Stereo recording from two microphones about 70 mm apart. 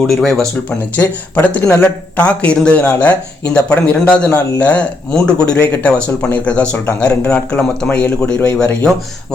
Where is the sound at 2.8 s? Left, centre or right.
Left.